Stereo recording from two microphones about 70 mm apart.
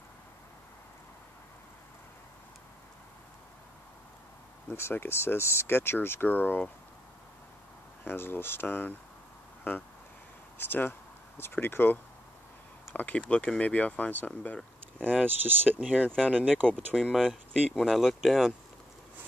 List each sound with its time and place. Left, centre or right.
4.6 s speech: left
8.0 s speech: left
10.6 s speech: left
12.9 s speech: centre
14.6 s a sound: centre
15.1 s speech: right
16.9 s speech: centre